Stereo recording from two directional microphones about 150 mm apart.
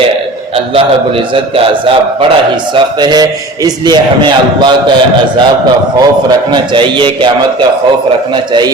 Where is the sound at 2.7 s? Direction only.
30° right (ahead or behind).